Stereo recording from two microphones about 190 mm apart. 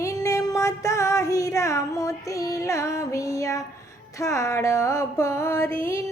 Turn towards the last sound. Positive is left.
turn(degrees=15)  # may be behind; listen again after turning